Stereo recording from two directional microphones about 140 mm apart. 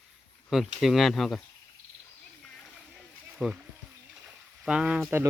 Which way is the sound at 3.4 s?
Centre (ahead or behind).